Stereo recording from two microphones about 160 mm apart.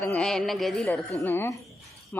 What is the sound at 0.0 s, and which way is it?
Speech, 10° left (ahead or behind).